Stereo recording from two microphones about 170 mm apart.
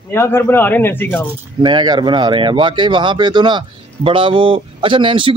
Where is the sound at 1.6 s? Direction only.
25° right (ahead or behind).